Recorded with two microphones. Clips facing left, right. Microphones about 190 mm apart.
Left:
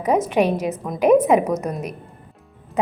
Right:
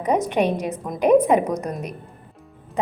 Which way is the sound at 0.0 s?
5° left (ahead or behind).